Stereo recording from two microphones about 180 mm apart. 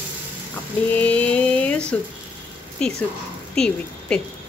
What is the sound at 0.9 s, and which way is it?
Speech, 10° left (ahead or behind).